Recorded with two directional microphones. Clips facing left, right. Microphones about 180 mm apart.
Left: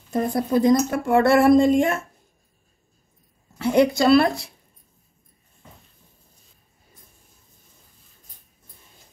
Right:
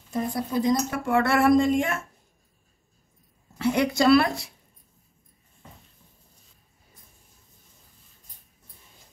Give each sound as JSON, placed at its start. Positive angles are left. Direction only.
{"t": 0.1, "sound": "speech", "side_deg": 55}
{"t": 3.7, "sound": "speech", "side_deg": 30}